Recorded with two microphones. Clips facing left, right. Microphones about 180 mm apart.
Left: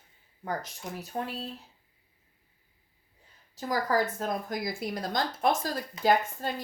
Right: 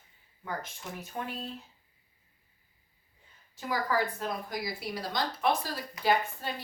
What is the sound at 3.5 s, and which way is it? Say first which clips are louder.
Speech: left 3 dB; 40° left (ahead or behind).